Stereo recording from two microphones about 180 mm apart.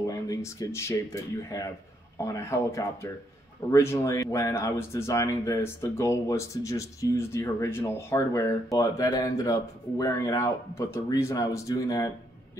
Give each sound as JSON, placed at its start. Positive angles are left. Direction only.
{"t": 0.0, "sound": "speech", "side_deg": 20}